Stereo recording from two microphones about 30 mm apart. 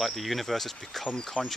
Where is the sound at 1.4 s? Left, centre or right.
Left.